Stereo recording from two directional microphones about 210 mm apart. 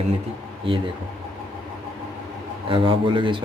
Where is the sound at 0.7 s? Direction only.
25° right (ahead or behind).